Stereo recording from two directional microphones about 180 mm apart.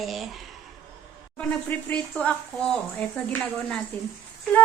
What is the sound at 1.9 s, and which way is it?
Speech, 5° left (ahead or behind).